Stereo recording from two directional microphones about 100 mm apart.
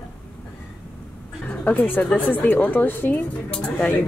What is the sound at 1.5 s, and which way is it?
A woman's voice, 15° left (ahead or behind).